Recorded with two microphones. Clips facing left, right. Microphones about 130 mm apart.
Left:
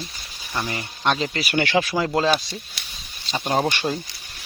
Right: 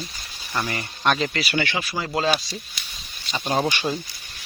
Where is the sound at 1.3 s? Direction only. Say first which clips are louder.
Even; 45° left (ahead or behind).